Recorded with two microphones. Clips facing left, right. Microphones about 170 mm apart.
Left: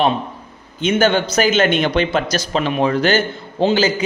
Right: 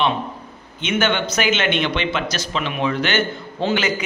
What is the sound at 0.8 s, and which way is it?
Speech, 35° left (ahead or behind).